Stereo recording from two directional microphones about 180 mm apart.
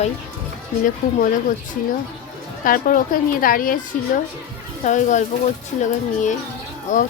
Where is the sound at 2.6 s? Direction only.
50° left (ahead or behind).